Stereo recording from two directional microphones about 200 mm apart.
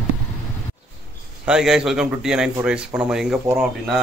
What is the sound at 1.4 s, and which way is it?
A man's voice, 5° right (ahead or behind).